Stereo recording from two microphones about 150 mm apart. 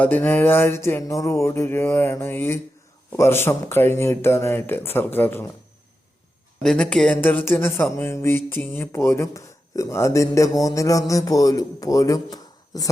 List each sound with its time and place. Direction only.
0.0 s speech: 10° left (ahead or behind)
6.6 s speech: 5° left (ahead or behind); by 12.9 s 25° left (ahead or behind)